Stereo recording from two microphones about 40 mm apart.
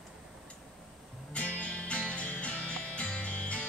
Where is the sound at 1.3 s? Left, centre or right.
Left.